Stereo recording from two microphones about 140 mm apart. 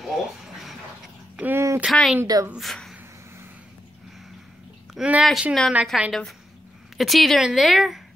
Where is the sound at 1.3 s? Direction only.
15° right (ahead or behind).